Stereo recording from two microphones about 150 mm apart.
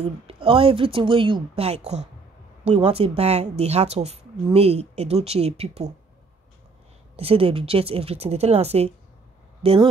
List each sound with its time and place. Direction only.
0.0 s a woman's voice: 40° right (ahead or behind)
7.2 s speech: 40° right (ahead or behind)